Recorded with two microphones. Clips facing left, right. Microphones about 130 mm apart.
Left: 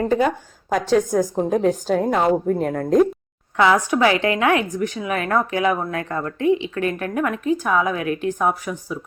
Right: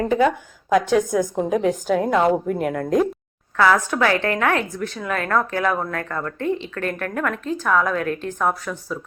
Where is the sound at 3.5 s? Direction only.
20° left (ahead or behind).